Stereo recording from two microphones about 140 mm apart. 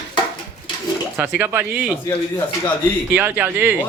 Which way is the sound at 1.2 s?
15° right (ahead or behind).